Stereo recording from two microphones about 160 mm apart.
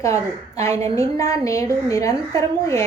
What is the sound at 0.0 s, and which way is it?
A woman's voice, 20° left (ahead or behind).